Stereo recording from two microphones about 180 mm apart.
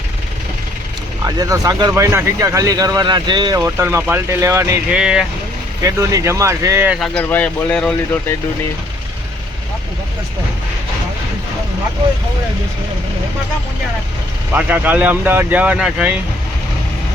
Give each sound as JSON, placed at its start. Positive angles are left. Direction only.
{"t": 1.2, "sound": "speech", "side_deg": -20}
{"t": 4.9, "sound": "speech", "side_deg": -5}
{"t": 5.8, "sound": "speech", "side_deg": -20}
{"t": 7.1, "sound": "speech", "side_deg": 10}
{"t": 14.5, "sound": "speech", "side_deg": -10}